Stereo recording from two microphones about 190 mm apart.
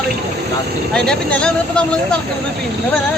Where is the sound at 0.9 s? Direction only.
5° left (ahead or behind).